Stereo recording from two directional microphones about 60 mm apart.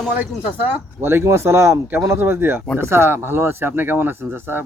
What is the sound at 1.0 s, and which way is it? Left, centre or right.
Speech, right.